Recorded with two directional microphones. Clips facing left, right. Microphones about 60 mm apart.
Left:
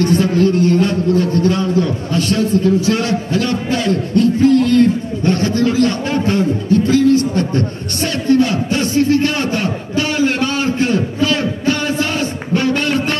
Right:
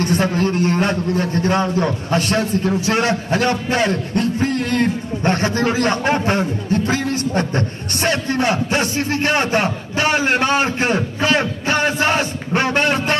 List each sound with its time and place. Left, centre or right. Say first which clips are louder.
0.0 s a man's voice: left 4 dB; right